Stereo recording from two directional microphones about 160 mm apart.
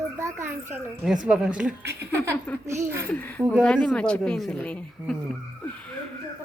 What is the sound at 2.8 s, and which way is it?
Speech, 15° right (ahead or behind).